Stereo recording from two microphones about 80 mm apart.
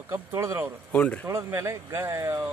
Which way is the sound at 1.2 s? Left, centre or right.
Right.